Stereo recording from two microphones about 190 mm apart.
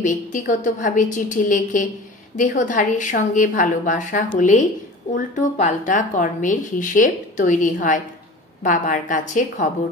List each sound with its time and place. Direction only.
0.0 s speech: 40° left (ahead or behind)